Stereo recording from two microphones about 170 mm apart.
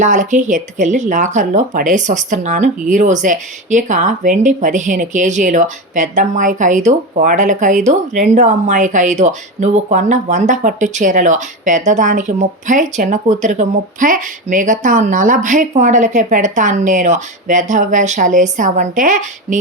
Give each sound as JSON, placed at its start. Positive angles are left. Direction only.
{"t": 0.0, "sound": "speech", "side_deg": -45}